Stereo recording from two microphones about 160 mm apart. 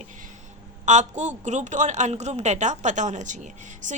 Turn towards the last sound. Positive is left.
turn(degrees=-50)  # may be behind; listen again after turning